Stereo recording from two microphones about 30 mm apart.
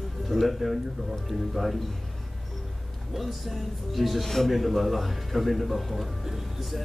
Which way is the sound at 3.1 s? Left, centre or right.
Centre.